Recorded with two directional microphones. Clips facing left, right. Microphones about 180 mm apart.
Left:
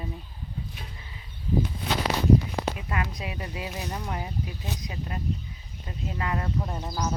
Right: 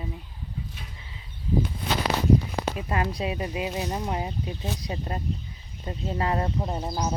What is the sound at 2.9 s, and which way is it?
Speech, 30° right (ahead or behind).